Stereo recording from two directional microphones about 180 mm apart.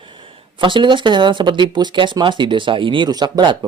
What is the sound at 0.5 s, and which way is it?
Speech, 25° right (ahead or behind).